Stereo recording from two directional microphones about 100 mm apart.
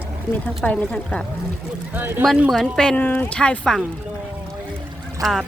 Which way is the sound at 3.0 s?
15° left (ahead or behind).